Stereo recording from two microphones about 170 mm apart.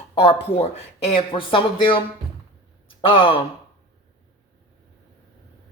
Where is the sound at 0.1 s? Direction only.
35° left (ahead or behind).